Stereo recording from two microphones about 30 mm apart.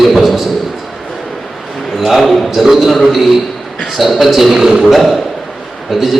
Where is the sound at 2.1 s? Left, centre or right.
Centre.